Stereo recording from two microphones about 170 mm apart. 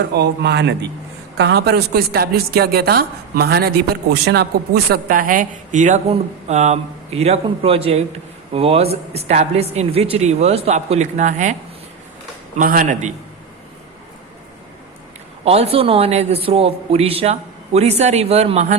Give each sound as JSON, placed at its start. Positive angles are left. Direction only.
{"t": 0.0, "sound": "a woman's voice", "side_deg": -85}
{"t": 12.5, "sound": "a man's voice", "side_deg": -55}
{"t": 15.4, "sound": "speech", "side_deg": -35}